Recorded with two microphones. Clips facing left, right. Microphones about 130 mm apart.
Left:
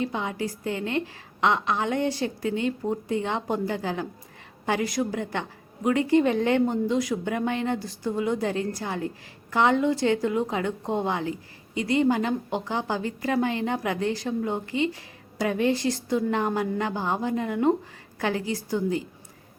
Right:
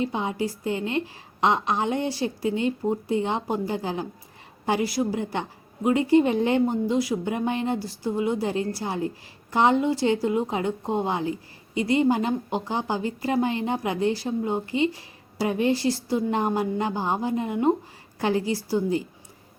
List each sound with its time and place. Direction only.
0.0 s a woman's voice: 25° right (ahead or behind)
2.0 s speech: 10° right (ahead or behind)
2.4 s a woman's voice: 25° right (ahead or behind)